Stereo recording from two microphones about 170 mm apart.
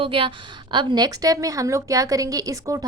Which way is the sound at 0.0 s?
30° right (ahead or behind).